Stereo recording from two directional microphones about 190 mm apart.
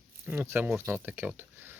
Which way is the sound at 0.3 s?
10° right (ahead or behind).